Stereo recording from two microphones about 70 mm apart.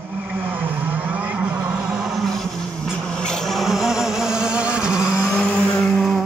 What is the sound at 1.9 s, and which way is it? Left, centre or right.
Vehicle, centre.